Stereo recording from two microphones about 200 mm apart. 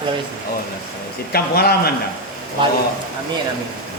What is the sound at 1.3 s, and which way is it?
Speech, 50° left (ahead or behind).